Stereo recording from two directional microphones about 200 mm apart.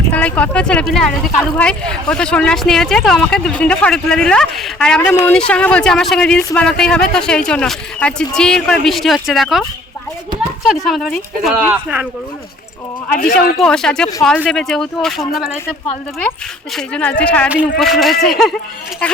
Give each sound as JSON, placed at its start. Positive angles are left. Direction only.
{"t": 0.1, "sound": "speech", "side_deg": 5}
{"t": 13.1, "sound": "speech", "side_deg": 40}
{"t": 13.6, "sound": "speech", "side_deg": 5}
{"t": 16.7, "sound": "speech", "side_deg": 5}